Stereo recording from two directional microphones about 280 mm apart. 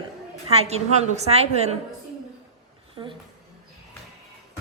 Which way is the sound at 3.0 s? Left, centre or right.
Centre.